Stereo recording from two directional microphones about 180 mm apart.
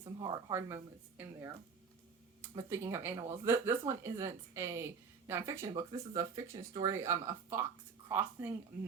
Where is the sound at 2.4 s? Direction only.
15° right (ahead or behind).